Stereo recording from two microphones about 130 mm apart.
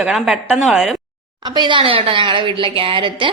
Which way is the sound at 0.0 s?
5° right (ahead or behind).